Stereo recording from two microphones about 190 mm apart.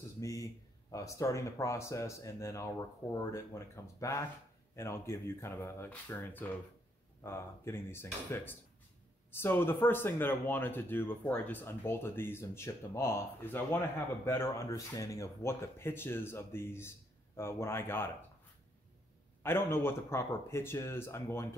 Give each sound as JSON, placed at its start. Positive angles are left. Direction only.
{"t": 0.2, "sound": "speech", "side_deg": 15}
{"t": 19.4, "sound": "speech", "side_deg": 10}